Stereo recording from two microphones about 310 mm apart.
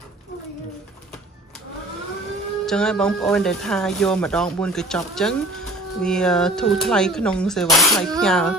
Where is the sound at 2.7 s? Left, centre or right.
Centre.